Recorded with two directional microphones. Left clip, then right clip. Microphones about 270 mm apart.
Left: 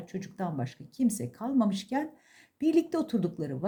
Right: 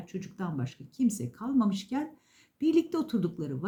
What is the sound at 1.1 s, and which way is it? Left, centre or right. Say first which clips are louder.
Speech: left 1 dB; centre.